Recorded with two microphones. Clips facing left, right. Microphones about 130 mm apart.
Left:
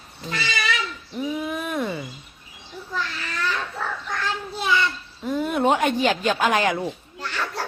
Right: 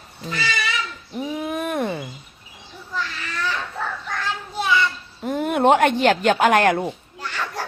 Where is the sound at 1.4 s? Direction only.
45° right (ahead or behind).